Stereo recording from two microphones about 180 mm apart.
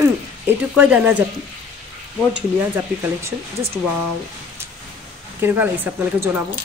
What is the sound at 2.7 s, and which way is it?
Speech, 15° right (ahead or behind).